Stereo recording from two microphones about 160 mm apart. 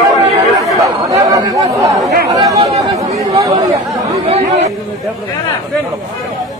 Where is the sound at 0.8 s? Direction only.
20° right (ahead or behind).